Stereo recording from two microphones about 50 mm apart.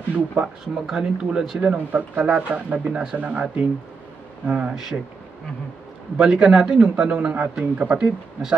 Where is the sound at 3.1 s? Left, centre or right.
Right.